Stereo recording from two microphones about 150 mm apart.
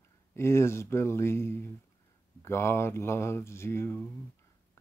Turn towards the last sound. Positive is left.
turn(degrees=15)  # may be behind; listen again after turning